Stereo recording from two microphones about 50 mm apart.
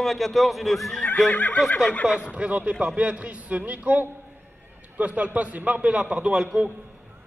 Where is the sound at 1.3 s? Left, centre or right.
Left.